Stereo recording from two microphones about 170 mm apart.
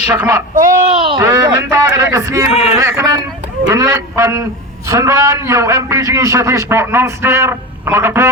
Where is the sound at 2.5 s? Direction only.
40° left (ahead or behind).